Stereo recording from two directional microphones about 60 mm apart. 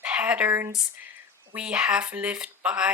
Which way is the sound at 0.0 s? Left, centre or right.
Right.